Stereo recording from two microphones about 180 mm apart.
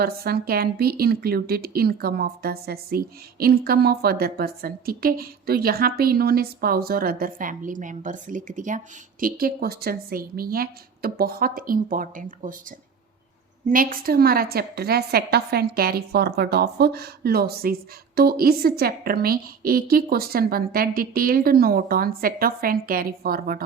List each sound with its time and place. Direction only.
0.0 s a woman's voice: 60° right (ahead or behind)
9.2 s speech: 55° right (ahead or behind)
13.7 s a woman's voice: 50° right (ahead or behind)